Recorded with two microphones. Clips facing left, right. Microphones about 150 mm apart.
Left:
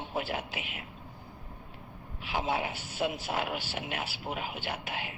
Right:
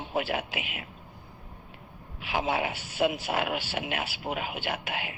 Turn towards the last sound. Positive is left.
turn(degrees=-85)